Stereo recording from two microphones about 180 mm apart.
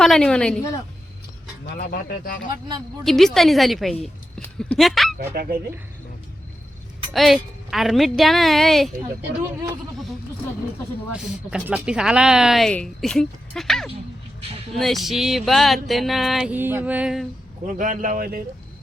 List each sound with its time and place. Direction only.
0.0 s speech: 5° left (ahead or behind)
1.6 s speech: 60° left (ahead or behind)
2.5 s speech: 25° right (ahead or behind)
3.0 s speech: centre (ahead or behind)
5.3 s speech: 60° right (ahead or behind)
7.1 s speech: centre (ahead or behind)
11.1 s speech: 5° right (ahead or behind)
14.4 s speech: 30° right (ahead or behind)
14.8 s speech: centre (ahead or behind)
17.7 s a man's voice: 45° right (ahead or behind)